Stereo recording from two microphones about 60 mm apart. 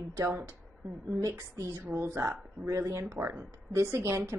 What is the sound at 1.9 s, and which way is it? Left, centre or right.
A woman's voice, right.